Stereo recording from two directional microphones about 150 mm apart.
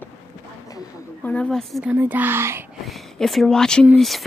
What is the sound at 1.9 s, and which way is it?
Speech, 10° right (ahead or behind).